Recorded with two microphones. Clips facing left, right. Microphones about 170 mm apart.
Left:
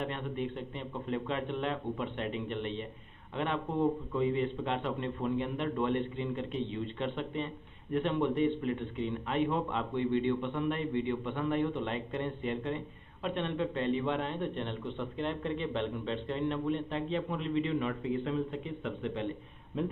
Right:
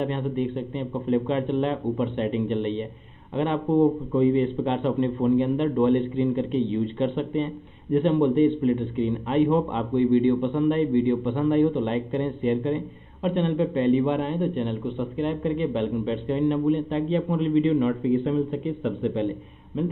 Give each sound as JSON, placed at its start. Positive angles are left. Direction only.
{"t": 0.0, "sound": "a man's voice", "side_deg": -25}
{"t": 19.7, "sound": "speech", "side_deg": 0}